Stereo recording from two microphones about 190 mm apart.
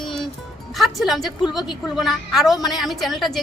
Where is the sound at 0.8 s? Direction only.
Centre (ahead or behind).